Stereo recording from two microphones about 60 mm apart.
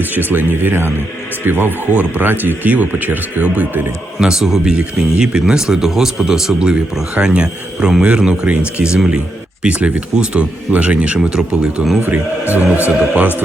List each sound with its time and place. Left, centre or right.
0.0 s speech: right
4.2 s speech: centre
4.7 s speech: centre
12.0 s speech: right